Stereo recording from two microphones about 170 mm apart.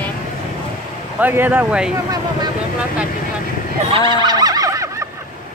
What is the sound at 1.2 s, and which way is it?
Speech, 10° right (ahead or behind).